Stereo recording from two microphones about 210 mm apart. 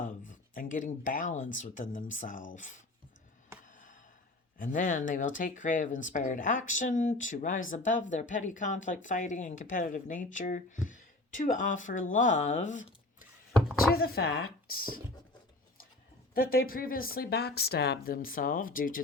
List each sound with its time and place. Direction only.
0.0 s speech: 40° left (ahead or behind)
3.7 s a sound: 40° left (ahead or behind)
4.5 s speech: 40° left (ahead or behind)
13.5 s a sound: centre (ahead or behind)
13.9 s speech: 45° left (ahead or behind)
16.3 s speech: 45° left (ahead or behind)